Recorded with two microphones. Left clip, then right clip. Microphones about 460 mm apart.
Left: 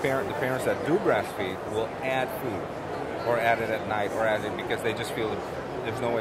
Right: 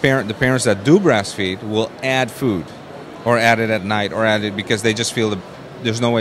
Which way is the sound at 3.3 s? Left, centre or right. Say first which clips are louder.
Right 10 dB; right.